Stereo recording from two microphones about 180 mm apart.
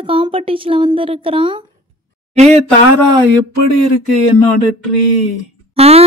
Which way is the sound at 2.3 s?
35° right (ahead or behind).